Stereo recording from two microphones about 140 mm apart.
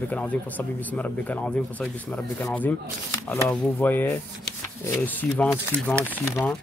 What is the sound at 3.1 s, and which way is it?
Speech, 25° left (ahead or behind).